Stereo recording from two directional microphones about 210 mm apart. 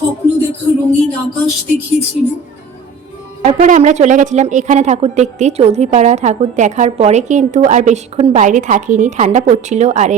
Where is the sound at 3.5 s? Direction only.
35° right (ahead or behind).